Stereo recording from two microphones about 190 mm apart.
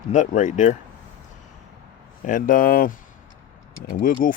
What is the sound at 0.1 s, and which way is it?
Speech, 40° left (ahead or behind).